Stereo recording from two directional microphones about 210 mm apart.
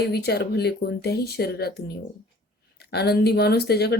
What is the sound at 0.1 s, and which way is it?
Speech, 50° left (ahead or behind).